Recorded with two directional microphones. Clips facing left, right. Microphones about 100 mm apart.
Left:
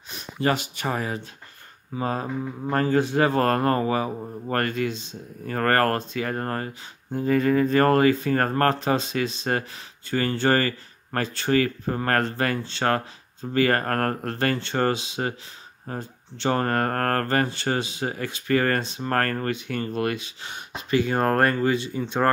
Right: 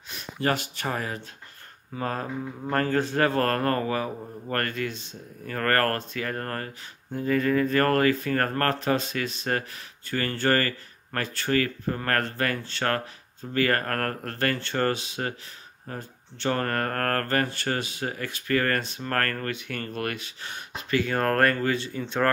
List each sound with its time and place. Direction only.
0.1 s speech: 20° left (ahead or behind)